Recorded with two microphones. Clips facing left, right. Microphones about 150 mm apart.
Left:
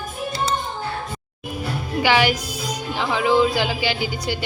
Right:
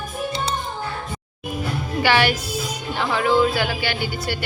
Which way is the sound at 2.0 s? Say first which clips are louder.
Left 1 dB; 15° left (ahead or behind).